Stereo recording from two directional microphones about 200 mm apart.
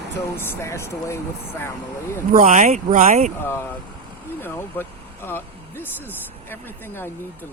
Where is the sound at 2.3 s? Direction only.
40° right (ahead or behind).